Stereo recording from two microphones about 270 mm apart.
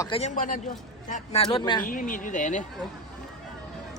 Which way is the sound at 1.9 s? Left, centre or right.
Left.